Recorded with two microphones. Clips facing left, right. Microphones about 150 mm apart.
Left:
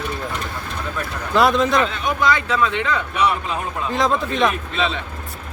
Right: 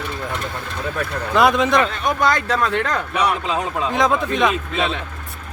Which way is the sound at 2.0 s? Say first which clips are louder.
Right 1 dB; 40° right (ahead or behind).